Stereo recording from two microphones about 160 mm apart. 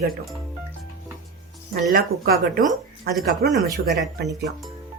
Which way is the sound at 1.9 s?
65° right (ahead or behind).